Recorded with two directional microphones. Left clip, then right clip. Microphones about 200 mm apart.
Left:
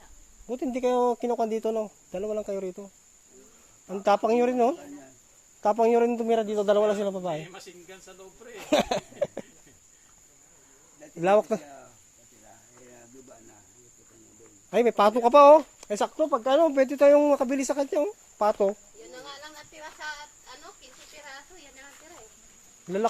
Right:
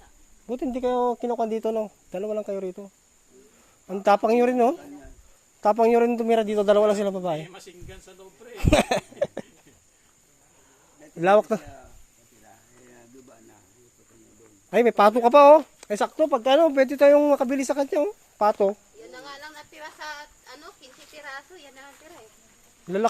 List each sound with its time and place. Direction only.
0.4 s speech: 20° right (ahead or behind)
0.7 s speech: 5° right (ahead or behind)
8.6 s a sound: 25° right (ahead or behind)
11.2 s speech: 20° right (ahead or behind)
14.7 s speech: 25° right (ahead or behind)
19.1 s a sound: 55° right (ahead or behind)